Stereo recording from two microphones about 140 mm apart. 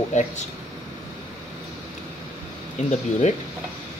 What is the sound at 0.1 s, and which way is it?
Speech, 60° left (ahead or behind).